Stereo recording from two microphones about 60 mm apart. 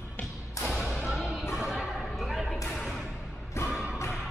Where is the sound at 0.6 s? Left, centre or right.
Left.